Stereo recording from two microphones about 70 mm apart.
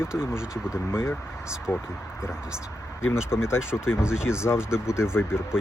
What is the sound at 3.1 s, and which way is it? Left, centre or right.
Speech, left.